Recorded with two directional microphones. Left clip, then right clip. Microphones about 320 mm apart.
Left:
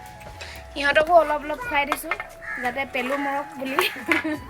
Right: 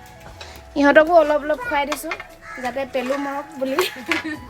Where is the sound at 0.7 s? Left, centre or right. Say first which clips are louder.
Right 4 dB; centre.